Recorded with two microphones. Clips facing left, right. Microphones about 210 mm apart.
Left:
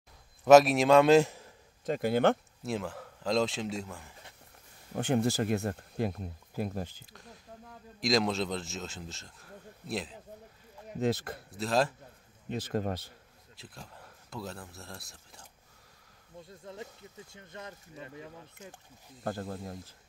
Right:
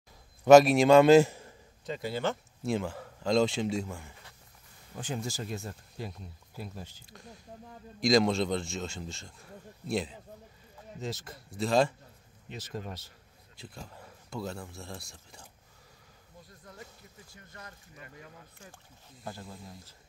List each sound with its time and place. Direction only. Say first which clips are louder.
0.5 s speech: right 2 dB; centre (ahead or behind)
1.9 s speech: left 6 dB; 55° left (ahead or behind)
2.6 s speech: right 3 dB; centre (ahead or behind)
4.9 s speech: left 8 dB; 60° left (ahead or behind)
7.1 s speech: right 2 dB; centre (ahead or behind)
11.0 s speech: left 9 dB; 60° left (ahead or behind)
11.5 s speech: right 3 dB; centre (ahead or behind)
12.4 s speech: left 8 dB; 55° left (ahead or behind)
13.6 s speech: right 3 dB; centre (ahead or behind)
16.4 s speech: left 6 dB; 25° left (ahead or behind)
19.2 s speech: left 7 dB; 55° left (ahead or behind)